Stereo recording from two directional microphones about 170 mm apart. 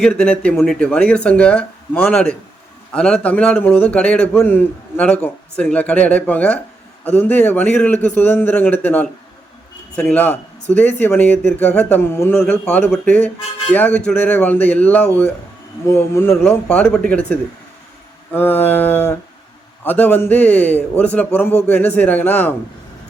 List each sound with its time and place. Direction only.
0.0 s a man's voice: 5° left (ahead or behind)
18.3 s a man's voice: 10° left (ahead or behind)